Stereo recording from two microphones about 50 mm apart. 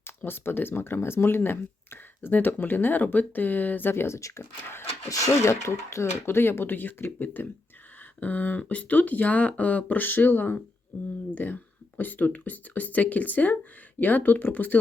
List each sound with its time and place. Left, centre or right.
0.3 s speech: left
4.0 s speech: left
10.9 s speech: left
11.3 s speech: left